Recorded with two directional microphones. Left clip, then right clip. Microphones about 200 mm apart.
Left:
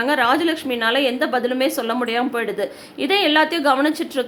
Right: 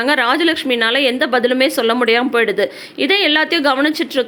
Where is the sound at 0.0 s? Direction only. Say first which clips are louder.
Right 3 dB; 25° right (ahead or behind).